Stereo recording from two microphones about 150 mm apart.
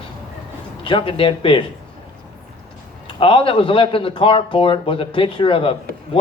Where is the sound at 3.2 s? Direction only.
40° left (ahead or behind).